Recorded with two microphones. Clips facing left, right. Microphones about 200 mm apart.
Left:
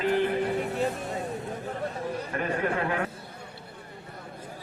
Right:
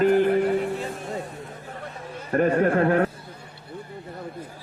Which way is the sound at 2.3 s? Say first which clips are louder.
Right 10 dB; 45° right (ahead or behind).